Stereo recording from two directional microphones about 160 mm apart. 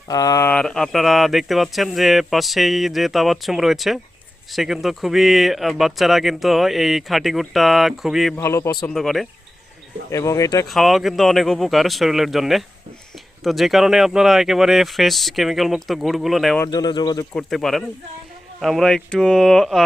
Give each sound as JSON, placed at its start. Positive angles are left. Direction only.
{"t": 0.1, "sound": "speech", "side_deg": 25}
{"t": 0.5, "sound": "speech", "side_deg": 5}
{"t": 8.4, "sound": "speech", "side_deg": 15}
{"t": 8.9, "sound": "speech", "side_deg": 0}
{"t": 10.1, "sound": "speech", "side_deg": 20}
{"t": 10.7, "sound": "speech", "side_deg": 0}
{"t": 16.6, "sound": "speech", "side_deg": 25}
{"t": 17.3, "sound": "speech", "side_deg": 0}